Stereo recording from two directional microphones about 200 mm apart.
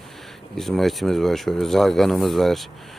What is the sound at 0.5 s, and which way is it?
Speech, centre (ahead or behind).